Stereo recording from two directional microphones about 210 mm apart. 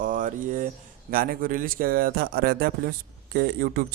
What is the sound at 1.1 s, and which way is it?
Speech, 45° right (ahead or behind).